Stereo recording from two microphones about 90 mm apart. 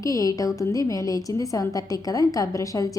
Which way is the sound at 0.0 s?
40° left (ahead or behind).